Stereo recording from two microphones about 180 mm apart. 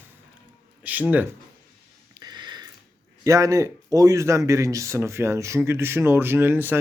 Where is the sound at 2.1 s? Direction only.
20° right (ahead or behind).